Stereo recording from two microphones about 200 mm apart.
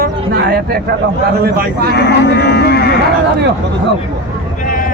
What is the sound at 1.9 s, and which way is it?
Cattle, 55° left (ahead or behind).